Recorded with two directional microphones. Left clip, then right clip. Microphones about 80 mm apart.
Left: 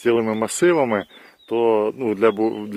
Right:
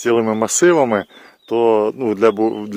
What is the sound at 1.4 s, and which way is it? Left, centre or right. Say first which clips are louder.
Speech: right 4 dB; right.